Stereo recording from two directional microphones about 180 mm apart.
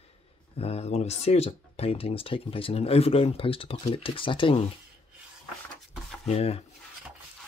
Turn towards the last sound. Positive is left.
turn(degrees=35)  # may be behind; listen again after turning